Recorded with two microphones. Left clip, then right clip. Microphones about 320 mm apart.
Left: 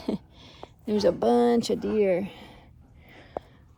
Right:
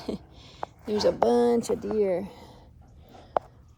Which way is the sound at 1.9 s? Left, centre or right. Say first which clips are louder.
Left 3 dB; left.